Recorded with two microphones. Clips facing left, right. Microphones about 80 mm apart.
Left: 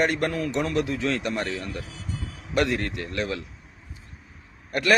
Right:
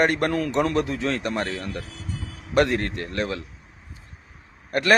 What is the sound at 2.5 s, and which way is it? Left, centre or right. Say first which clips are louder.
Speech: right 3 dB; right.